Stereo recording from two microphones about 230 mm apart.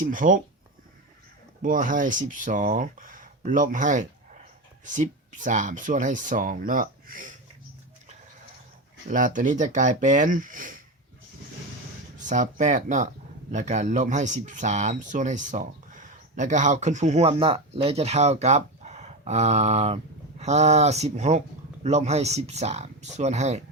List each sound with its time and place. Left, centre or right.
0.0 s speech: right
1.6 s speech: right
9.0 s speech: right
12.1 s speech: right